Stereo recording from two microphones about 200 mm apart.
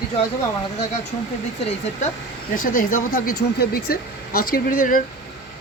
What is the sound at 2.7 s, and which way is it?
Speech, 45° left (ahead or behind).